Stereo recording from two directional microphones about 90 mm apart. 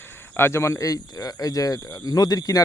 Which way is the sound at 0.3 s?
25° left (ahead or behind).